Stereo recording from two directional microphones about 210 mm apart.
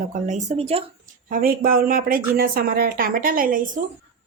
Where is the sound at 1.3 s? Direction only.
45° right (ahead or behind).